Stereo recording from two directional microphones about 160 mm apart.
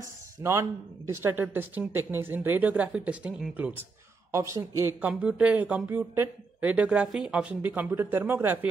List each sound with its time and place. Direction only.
0.4 s speech: 15° right (ahead or behind)
4.3 s speech: 20° right (ahead or behind)